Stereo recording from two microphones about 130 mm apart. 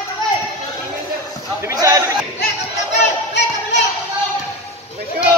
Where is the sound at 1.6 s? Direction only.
25° right (ahead or behind).